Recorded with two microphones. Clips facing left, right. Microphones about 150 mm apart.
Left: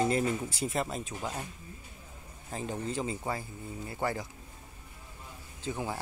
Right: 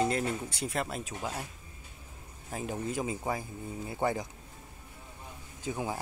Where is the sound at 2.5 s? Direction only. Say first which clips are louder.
Even; 10° right (ahead or behind).